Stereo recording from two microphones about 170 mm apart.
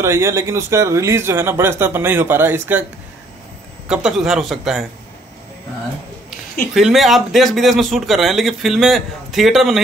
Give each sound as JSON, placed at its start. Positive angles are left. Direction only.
{"t": 0.0, "sound": "speech", "side_deg": -15}
{"t": 3.9, "sound": "a man's voice", "side_deg": -5}
{"t": 6.7, "sound": "a man's voice", "side_deg": 0}